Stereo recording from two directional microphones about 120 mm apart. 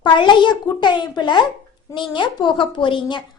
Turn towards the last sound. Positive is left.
turn(degrees=40)  # may be behind; listen again after turning